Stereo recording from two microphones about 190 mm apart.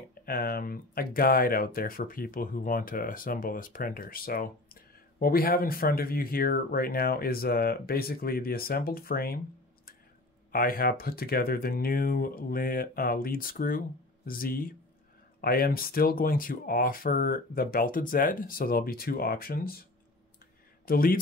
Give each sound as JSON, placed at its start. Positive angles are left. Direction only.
{"t": 0.1, "sound": "speech", "side_deg": 50}
{"t": 10.5, "sound": "speech", "side_deg": 50}